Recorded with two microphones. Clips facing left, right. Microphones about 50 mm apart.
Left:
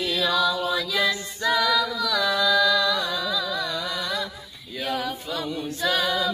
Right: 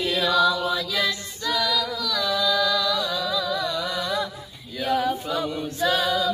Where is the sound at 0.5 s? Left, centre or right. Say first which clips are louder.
Even; centre.